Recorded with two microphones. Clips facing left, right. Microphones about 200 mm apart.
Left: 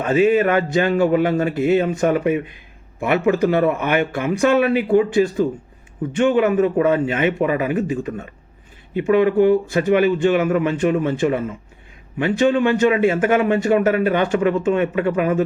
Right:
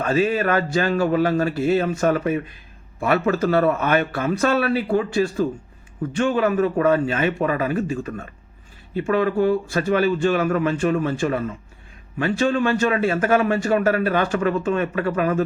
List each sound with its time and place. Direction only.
0.0 s a man's voice: 20° left (ahead or behind)